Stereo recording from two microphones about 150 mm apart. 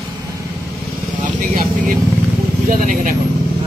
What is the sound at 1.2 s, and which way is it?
Speech, 60° right (ahead or behind).